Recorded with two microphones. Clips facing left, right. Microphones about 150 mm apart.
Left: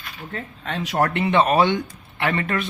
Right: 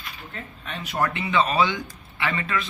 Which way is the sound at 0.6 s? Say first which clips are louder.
Left 4 dB; 90° left.